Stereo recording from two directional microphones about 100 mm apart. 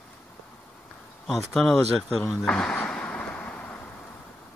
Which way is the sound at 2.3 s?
5° left (ahead or behind).